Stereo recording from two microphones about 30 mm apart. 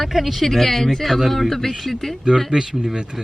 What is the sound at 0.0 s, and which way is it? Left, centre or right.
Speech, centre.